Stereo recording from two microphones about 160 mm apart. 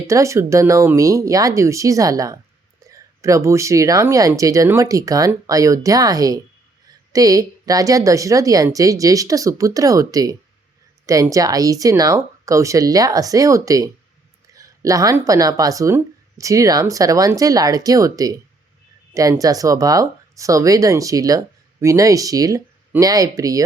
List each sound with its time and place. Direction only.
0.1 s speech: 20° right (ahead or behind)